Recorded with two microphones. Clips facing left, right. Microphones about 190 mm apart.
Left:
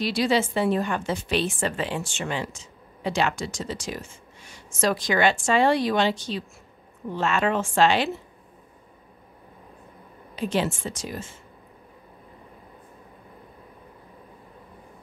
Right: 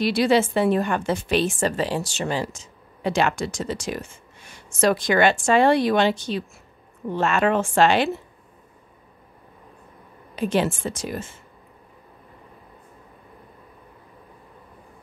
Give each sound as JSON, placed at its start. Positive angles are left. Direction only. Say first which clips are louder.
{"t": 0.0, "sound": "a woman's voice", "louder": "right 4 dB", "side_deg": -60}
{"t": 10.3, "sound": "a woman's voice", "louder": "right 3 dB", "side_deg": -55}